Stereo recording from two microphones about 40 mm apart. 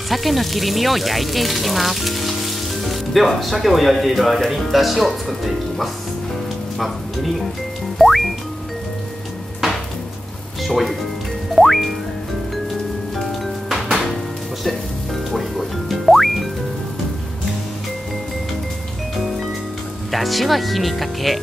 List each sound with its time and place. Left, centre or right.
0.1 s speech: centre
8.0 s music: centre
10.6 s speech: centre
11.5 s music: centre
15.9 s music: centre
20.1 s speech: centre